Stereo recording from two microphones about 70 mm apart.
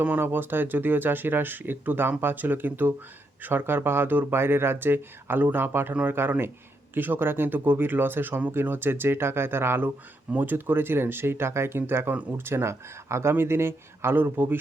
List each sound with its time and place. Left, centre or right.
0.2 s speech: right